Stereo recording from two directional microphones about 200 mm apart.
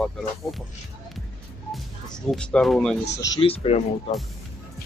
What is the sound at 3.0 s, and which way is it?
Speech, 60° left (ahead or behind).